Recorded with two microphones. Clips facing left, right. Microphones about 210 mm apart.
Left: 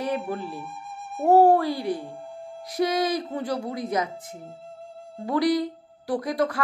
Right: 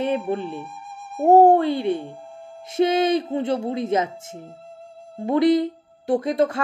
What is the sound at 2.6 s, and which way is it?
A woman's voice, 25° right (ahead or behind).